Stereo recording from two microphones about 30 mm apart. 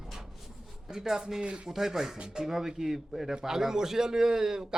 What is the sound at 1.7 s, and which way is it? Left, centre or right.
A man's voice, centre.